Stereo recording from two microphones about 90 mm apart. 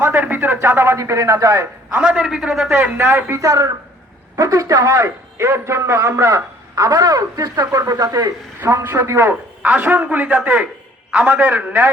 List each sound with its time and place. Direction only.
0.0 s a man's voice: 20° right (ahead or behind)
1.9 s a man's voice: 10° right (ahead or behind)
2.6 s a man's voice: 25° right (ahead or behind)
3.4 s a man's voice: 40° right (ahead or behind); by 11.9 s 20° right (ahead or behind)